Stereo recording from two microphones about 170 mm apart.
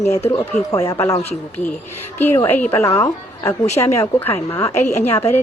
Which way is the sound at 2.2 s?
10° left (ahead or behind).